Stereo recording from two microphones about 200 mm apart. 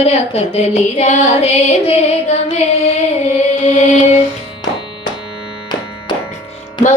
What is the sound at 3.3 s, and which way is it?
Music, 35° left (ahead or behind).